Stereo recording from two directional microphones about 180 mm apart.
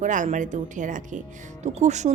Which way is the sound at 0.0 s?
45° right (ahead or behind).